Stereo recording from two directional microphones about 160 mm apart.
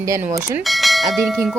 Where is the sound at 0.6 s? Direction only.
Centre (ahead or behind).